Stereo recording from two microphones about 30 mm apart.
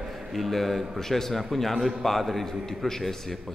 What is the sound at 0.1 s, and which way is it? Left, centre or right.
A man's voice, centre.